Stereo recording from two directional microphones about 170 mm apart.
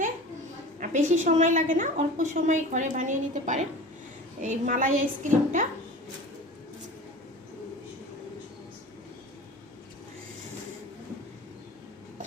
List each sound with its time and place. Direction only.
0.8 s a woman's voice: 50° right (ahead or behind)